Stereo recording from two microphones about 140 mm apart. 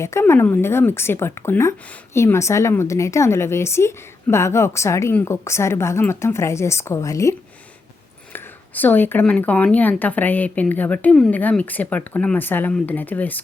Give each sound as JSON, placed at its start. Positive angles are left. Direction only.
{"t": 0.0, "sound": "a woman's voice", "side_deg": 20}